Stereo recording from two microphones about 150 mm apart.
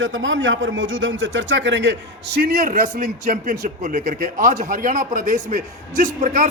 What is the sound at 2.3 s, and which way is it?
A man's voice, 80° right.